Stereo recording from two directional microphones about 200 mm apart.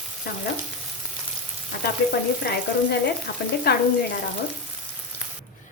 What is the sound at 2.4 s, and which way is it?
Speech, 50° left (ahead or behind).